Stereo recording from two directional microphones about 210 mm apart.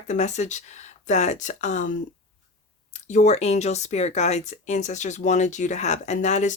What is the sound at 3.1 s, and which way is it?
Speech, 30° left (ahead or behind).